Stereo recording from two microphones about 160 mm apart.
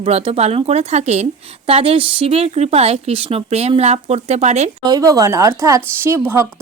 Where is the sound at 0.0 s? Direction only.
35° right (ahead or behind).